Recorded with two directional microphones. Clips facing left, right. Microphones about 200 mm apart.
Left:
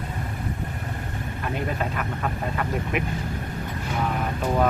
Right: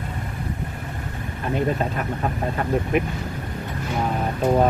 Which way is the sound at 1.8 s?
35° right (ahead or behind).